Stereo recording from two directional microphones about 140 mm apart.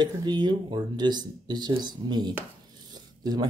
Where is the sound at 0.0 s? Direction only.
30° right (ahead or behind).